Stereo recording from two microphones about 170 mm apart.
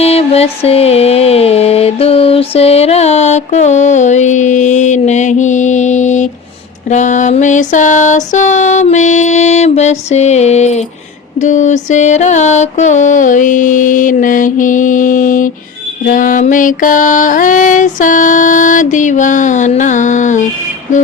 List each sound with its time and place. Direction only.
0.0 s music: 35° left (ahead or behind)
6.9 s mantra: 45° left (ahead or behind)